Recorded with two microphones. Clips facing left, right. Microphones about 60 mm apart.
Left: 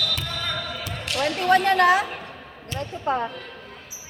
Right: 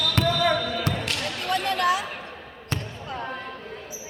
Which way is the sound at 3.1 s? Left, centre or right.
Left.